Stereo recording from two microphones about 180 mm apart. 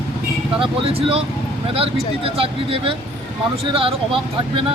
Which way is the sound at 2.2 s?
30° right (ahead or behind).